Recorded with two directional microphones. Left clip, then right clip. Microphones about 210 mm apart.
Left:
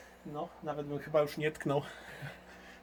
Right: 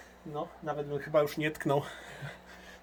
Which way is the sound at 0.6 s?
20° right (ahead or behind).